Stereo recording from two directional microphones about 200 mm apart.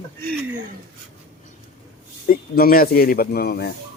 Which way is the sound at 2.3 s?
45° left (ahead or behind).